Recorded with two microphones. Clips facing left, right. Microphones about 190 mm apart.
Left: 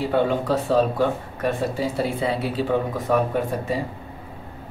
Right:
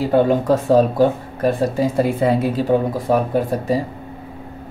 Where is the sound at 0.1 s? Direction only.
45° right (ahead or behind).